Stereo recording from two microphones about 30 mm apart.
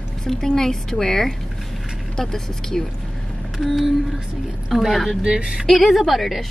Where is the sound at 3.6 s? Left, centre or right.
Centre.